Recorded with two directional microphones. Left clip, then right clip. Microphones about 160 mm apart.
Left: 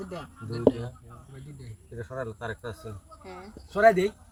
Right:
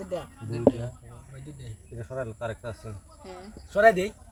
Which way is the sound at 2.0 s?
Centre (ahead or behind).